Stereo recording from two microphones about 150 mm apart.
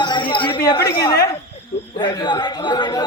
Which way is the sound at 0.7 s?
20° left (ahead or behind).